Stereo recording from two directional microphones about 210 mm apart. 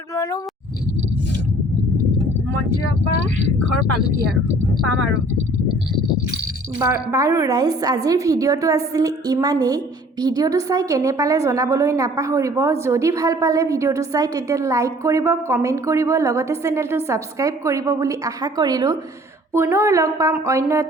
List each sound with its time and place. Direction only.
6.7 s a woman's voice: 15° right (ahead or behind)